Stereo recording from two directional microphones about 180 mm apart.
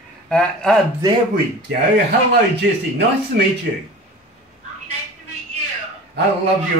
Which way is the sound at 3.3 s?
65° right (ahead or behind).